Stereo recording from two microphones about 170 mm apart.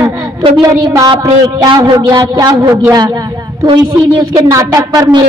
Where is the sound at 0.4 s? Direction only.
25° right (ahead or behind).